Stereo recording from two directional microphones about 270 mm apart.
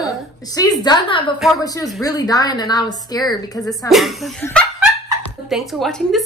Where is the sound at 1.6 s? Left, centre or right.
Centre.